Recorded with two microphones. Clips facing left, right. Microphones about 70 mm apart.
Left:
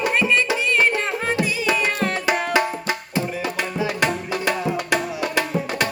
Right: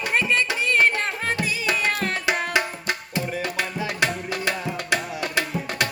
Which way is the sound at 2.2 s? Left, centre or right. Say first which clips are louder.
Left 4 dB; centre.